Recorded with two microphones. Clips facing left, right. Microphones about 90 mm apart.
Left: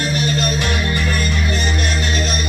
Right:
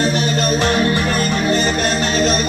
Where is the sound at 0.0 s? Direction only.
30° right (ahead or behind).